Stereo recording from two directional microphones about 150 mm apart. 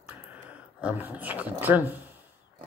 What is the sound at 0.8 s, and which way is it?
Speech, 10° right (ahead or behind).